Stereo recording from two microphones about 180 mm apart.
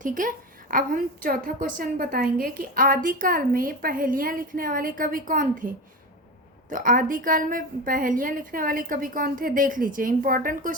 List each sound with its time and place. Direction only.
0.0 s a woman's voice: 45° right (ahead or behind)